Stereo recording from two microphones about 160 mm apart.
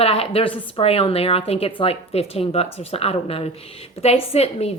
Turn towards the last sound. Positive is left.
turn(degrees=40)  # may be behind; listen again after turning